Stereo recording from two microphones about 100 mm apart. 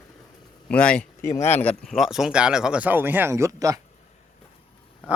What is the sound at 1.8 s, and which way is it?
Speech, centre (ahead or behind).